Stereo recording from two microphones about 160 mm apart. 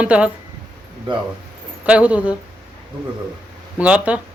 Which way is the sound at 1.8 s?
10° right (ahead or behind).